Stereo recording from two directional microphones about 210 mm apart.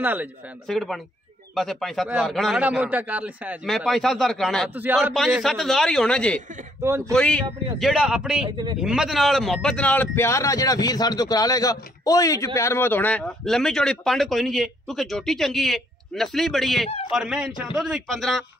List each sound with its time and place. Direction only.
0.0 s a man's voice: 10° right (ahead or behind)
8.5 s a man's voice: 20° right (ahead or behind)
8.8 s a man's voice: centre (ahead or behind)